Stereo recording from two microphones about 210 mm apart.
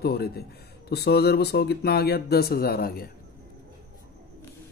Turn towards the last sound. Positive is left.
turn(degrees=45)  # may be behind; listen again after turning